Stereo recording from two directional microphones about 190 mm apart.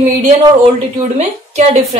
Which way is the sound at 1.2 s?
35° right (ahead or behind).